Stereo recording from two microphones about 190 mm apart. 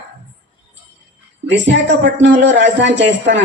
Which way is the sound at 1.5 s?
70° right (ahead or behind).